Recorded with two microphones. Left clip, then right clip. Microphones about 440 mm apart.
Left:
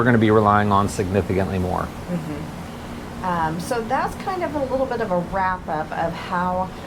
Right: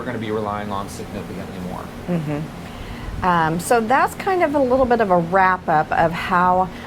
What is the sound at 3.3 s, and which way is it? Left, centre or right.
A woman's voice, right.